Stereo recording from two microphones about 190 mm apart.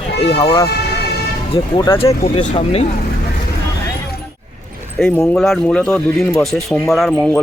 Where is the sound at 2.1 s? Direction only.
30° left (ahead or behind).